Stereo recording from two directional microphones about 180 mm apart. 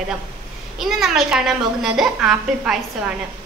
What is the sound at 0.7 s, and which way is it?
A woman's voice, centre (ahead or behind).